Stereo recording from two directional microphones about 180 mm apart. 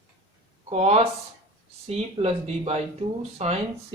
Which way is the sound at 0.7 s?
35° right (ahead or behind).